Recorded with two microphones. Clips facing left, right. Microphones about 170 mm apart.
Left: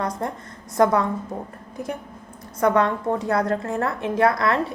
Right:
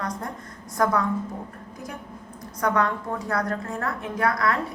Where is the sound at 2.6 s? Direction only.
25° left (ahead or behind).